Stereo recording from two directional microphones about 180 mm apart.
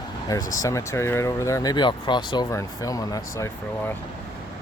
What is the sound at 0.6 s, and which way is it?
Speech, 15° left (ahead or behind).